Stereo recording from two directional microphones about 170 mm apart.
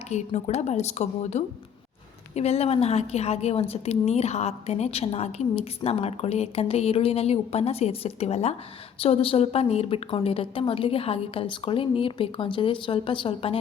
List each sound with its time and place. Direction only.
0.1 s a woman's voice: 40° left (ahead or behind)